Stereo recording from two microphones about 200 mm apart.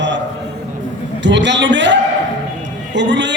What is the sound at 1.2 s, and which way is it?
A man's voice, 60° right (ahead or behind).